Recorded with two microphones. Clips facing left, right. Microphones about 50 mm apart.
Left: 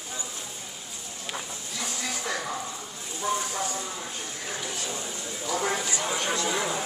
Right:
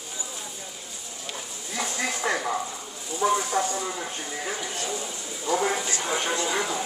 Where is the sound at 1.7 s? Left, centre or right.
Right.